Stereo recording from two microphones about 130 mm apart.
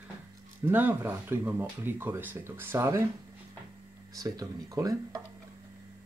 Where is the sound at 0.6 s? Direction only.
15° right (ahead or behind).